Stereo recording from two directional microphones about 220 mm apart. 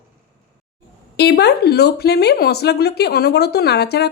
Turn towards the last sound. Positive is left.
turn(degrees=50)  # may be behind; listen again after turning